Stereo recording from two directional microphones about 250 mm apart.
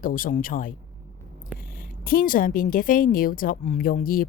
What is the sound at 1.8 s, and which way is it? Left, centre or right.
A woman's voice, left.